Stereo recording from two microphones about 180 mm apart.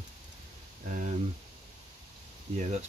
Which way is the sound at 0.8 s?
45° right (ahead or behind).